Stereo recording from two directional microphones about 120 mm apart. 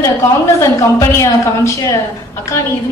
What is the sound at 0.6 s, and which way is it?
A man's voice, 25° left (ahead or behind).